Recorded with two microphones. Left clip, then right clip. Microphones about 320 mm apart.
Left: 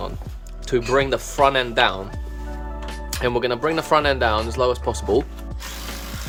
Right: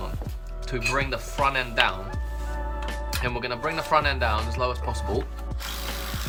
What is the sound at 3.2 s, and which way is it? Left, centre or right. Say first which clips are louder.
Speech: left 9 dB; left.